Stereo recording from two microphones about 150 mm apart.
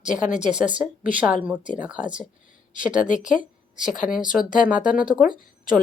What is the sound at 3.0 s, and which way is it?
Speech, 55° left (ahead or behind).